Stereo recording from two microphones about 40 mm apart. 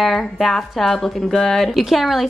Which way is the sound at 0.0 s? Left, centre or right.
Centre.